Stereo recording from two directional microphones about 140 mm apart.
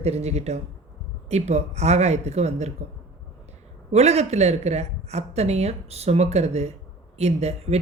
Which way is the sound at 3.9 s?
50° right (ahead or behind).